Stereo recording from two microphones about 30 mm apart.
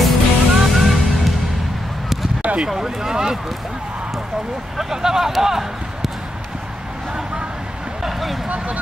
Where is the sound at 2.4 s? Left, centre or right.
Right.